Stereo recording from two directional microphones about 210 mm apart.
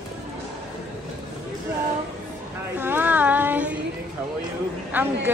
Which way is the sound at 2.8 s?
10° right (ahead or behind).